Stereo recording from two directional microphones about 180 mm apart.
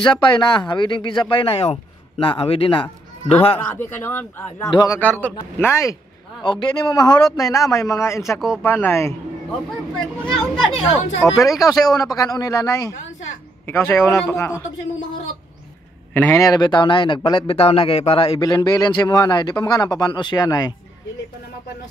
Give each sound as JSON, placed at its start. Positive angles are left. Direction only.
{"t": 0.0, "sound": "speech", "side_deg": 25}
{"t": 3.5, "sound": "a man's voice", "side_deg": 10}
{"t": 6.4, "sound": "a man's voice", "side_deg": 25}
{"t": 10.3, "sound": "speech", "side_deg": 0}
{"t": 11.5, "sound": "a man's voice", "side_deg": 20}
{"t": 16.1, "sound": "speech", "side_deg": 10}